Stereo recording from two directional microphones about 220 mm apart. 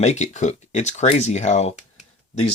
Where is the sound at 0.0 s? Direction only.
30° left (ahead or behind).